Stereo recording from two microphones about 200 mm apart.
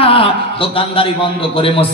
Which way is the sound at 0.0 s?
25° left (ahead or behind).